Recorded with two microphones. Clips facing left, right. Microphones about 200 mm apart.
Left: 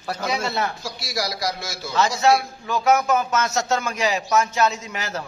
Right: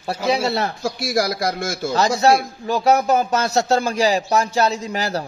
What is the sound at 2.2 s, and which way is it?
Speech, 35° right (ahead or behind).